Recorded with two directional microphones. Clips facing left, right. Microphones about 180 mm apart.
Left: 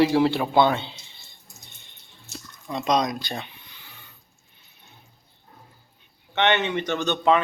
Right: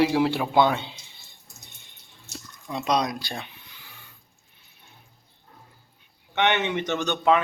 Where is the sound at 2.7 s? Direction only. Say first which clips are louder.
Left 2 dB; 10° right (ahead or behind).